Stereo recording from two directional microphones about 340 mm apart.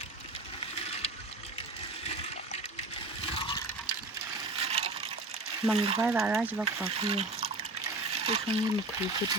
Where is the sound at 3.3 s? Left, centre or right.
Centre.